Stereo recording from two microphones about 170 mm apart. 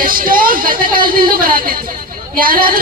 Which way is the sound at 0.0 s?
55° right (ahead or behind).